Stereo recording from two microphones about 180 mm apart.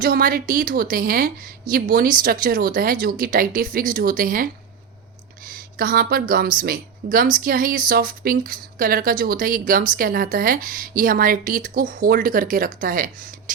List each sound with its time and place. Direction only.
0.0 s speech: 55° right (ahead or behind)
5.7 s speech: 50° right (ahead or behind)